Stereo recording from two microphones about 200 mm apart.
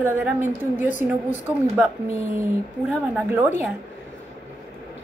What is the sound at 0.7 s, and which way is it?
Speech, 40° left (ahead or behind).